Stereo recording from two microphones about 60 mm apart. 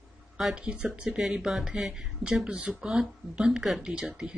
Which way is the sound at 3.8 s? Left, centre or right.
Centre.